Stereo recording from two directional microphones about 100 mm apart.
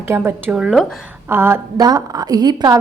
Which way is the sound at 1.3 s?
25° right (ahead or behind).